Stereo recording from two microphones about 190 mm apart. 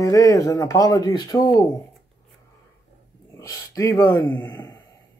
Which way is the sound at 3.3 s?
15° left (ahead or behind).